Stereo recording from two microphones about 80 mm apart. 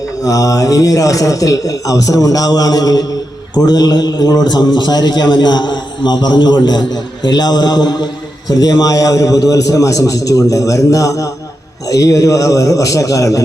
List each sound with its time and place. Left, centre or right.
0.3 s a man's voice: left